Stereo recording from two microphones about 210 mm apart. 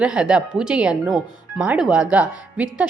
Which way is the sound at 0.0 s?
5° right (ahead or behind).